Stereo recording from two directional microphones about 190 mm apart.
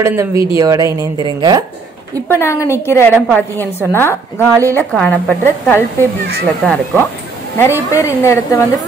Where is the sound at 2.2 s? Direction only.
10° left (ahead or behind).